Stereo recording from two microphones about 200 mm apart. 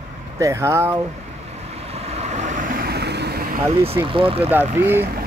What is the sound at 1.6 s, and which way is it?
Vehicle, 30° right (ahead or behind).